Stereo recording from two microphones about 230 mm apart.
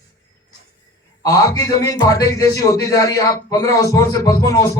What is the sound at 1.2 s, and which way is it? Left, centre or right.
Speech, centre.